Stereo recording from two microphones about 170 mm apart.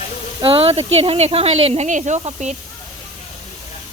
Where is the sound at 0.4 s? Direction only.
30° right (ahead or behind).